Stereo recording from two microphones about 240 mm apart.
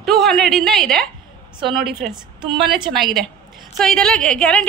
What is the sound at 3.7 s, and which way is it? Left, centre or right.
Speech, centre.